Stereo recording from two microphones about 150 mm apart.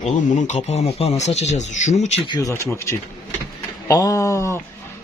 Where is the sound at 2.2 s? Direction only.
25° left (ahead or behind).